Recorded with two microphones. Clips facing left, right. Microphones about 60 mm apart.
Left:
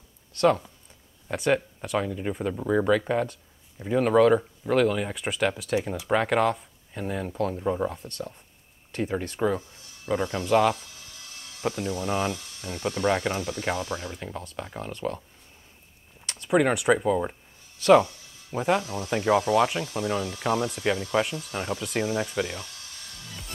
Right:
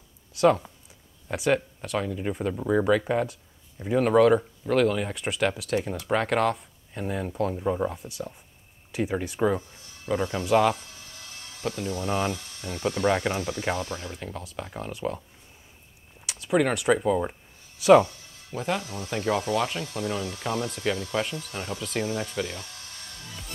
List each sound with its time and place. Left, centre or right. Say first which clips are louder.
0.3 s speech: right 1 dB; centre
10.0 s speech: even; centre
11.8 s speech: right 1 dB; centre
12.9 s speech: even; centre
13.8 s speech: left 2 dB; centre
14.1 s speech: even; centre
16.3 s speech: left 1 dB; centre
18.5 s speech: left 4 dB; left
21.7 s speech: left 1 dB; centre